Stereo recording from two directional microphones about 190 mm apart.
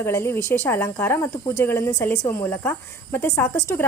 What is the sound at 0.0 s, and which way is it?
Speech, 15° left (ahead or behind).